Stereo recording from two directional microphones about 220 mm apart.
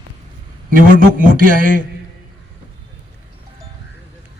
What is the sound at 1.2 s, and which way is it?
Speech, 40° right (ahead or behind).